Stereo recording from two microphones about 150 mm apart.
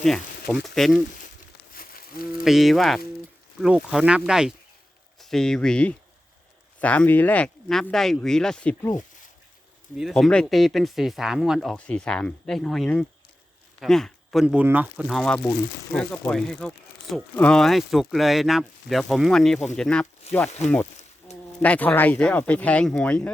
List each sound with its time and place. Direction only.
0.0 s speech: centre (ahead or behind)
1.7 s a sound: 75° left (ahead or behind)
2.4 s speech: centre (ahead or behind)
9.9 s speech: 5° right (ahead or behind)
13.7 s a sound: 5° left (ahead or behind)
14.4 s speech: 10° right (ahead or behind)
15.0 s speech: centre (ahead or behind)
20.3 s speech: 45° left (ahead or behind)
21.6 s speech: 10° left (ahead or behind)